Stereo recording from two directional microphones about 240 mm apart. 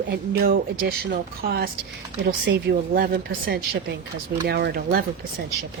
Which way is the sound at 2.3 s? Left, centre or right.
Right.